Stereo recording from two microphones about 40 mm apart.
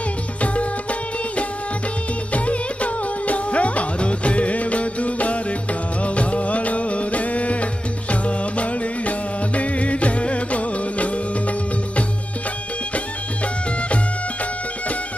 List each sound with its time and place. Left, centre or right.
2.3 s music: left